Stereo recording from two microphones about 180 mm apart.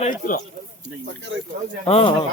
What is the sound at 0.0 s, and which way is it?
Speech, 50° left (ahead or behind).